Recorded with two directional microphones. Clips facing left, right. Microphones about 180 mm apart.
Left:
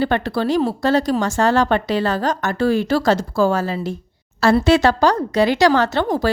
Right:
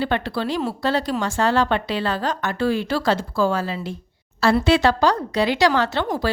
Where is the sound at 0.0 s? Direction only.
45° left (ahead or behind).